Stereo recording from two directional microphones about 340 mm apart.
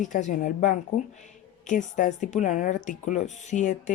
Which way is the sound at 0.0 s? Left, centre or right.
Left.